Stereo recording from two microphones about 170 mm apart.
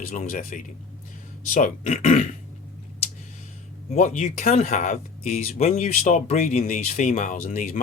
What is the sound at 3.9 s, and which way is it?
Speech, 40° left (ahead or behind).